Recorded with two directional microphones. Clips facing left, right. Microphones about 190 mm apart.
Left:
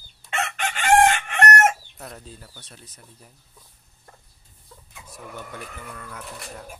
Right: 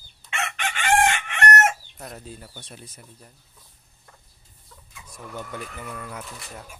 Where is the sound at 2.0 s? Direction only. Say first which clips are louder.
Right 2 dB; 5° right (ahead or behind).